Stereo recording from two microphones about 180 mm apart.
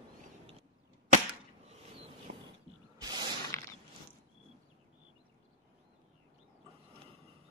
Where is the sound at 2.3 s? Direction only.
45° right (ahead or behind).